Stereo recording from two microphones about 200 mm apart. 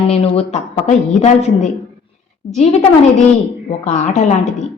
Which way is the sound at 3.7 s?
35° left (ahead or behind).